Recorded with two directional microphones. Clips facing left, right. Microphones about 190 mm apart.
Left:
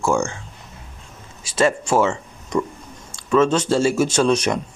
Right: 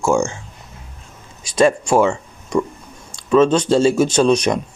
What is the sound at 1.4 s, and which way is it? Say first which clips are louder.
Speech: right 4 dB; 15° right (ahead or behind).